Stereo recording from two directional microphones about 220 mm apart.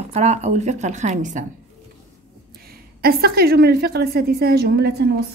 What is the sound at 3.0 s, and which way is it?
A woman's voice, 45° right (ahead or behind).